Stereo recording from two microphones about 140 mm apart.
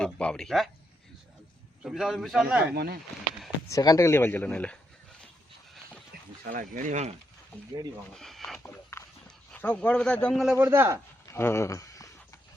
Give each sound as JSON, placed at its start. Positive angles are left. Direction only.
{"t": 0.0, "sound": "a man's voice", "side_deg": 5}
{"t": 1.8, "sound": "a man's voice", "side_deg": -5}
{"t": 3.7, "sound": "speech", "side_deg": 25}
{"t": 6.4, "sound": "speech", "side_deg": -80}
{"t": 8.1, "sound": "speech", "side_deg": 5}
{"t": 8.5, "sound": "dog", "side_deg": 15}
{"t": 9.2, "sound": "speech", "side_deg": 10}
{"t": 10.5, "sound": "a man's voice", "side_deg": -20}
{"t": 11.3, "sound": "speech", "side_deg": 20}